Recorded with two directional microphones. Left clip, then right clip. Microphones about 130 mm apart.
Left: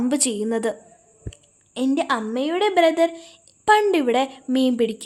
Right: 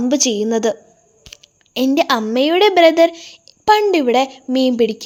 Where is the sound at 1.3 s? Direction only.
40° right (ahead or behind).